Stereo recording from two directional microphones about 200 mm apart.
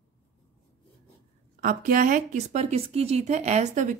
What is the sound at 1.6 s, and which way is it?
A woman's voice, 45° right (ahead or behind).